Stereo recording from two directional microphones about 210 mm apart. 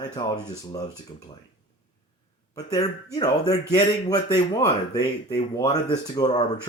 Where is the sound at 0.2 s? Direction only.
20° left (ahead or behind).